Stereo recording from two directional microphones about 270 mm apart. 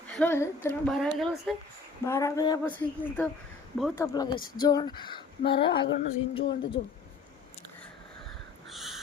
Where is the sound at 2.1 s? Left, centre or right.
Centre.